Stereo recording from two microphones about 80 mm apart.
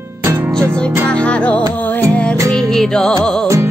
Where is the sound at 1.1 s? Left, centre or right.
Centre.